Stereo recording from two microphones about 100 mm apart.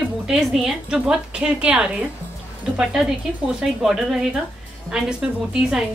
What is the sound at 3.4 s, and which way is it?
A woman's voice, 5° right (ahead or behind).